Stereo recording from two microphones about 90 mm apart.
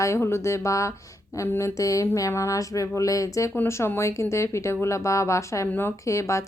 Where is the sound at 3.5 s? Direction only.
25° left (ahead or behind).